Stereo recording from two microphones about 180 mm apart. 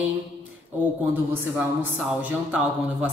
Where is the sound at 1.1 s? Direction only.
10° right (ahead or behind).